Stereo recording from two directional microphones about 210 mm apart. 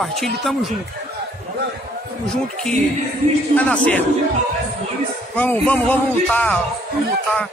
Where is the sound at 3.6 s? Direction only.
5° left (ahead or behind).